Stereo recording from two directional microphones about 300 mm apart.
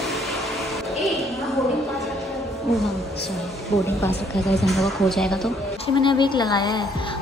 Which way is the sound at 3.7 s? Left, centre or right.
Centre.